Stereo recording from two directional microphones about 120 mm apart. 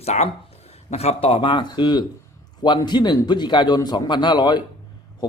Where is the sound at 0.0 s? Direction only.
65° left (ahead or behind).